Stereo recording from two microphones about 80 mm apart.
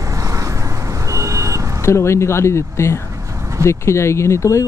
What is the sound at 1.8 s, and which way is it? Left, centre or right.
Speech, left.